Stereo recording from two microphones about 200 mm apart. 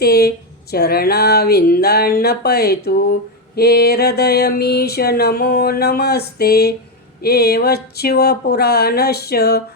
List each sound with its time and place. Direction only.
0.0 s speech: 50° left (ahead or behind)